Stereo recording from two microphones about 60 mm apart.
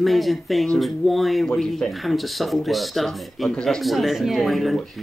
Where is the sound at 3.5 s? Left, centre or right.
Centre.